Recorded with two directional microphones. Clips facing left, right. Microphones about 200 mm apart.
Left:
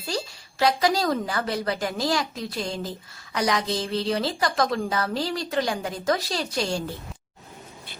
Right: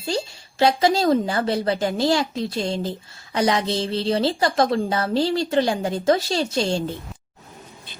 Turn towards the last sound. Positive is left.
turn(degrees=-25)  # may be behind; listen again after turning